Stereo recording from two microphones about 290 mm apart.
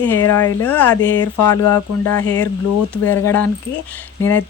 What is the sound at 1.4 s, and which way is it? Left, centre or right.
Speech, left.